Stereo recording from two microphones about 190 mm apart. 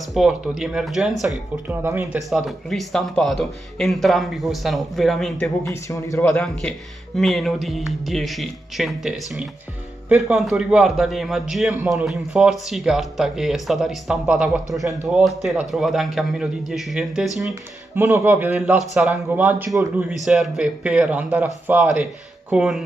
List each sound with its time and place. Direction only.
0.1 s a man's voice: centre (ahead or behind)
1.8 s a man's voice: 15° right (ahead or behind)
2.1 s a man's voice: centre (ahead or behind)
5.6 s speech: 15° left (ahead or behind)
6.4 s a man's voice: 5° left (ahead or behind)